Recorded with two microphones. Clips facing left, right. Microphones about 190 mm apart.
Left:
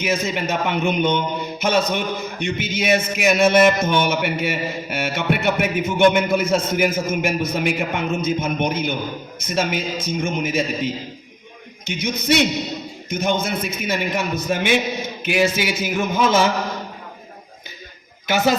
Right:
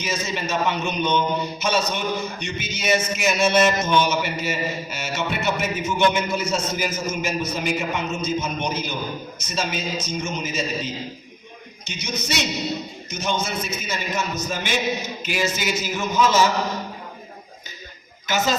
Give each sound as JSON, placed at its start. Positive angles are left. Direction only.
{"t": 0.0, "sound": "a man's voice", "side_deg": 60}